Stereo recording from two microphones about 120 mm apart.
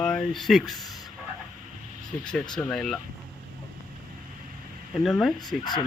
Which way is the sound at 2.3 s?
5° left (ahead or behind).